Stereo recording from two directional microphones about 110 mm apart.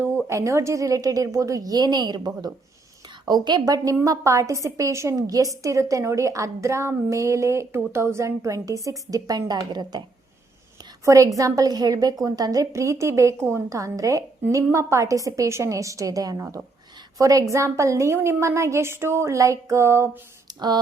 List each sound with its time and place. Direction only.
0.0 s a woman's voice: 25° right (ahead or behind)
11.0 s a woman's voice: 30° right (ahead or behind)
20.5 s a sound: 40° right (ahead or behind)